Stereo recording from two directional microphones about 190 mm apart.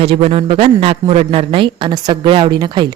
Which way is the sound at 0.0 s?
30° right (ahead or behind).